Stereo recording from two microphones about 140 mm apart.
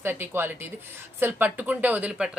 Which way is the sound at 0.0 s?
15° right (ahead or behind).